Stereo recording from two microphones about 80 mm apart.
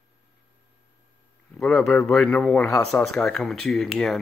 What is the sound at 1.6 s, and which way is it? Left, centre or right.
A man's voice, centre.